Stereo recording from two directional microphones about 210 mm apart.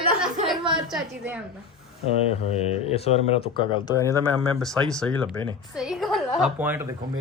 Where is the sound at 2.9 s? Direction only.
30° left (ahead or behind); by 6.9 s 10° right (ahead or behind).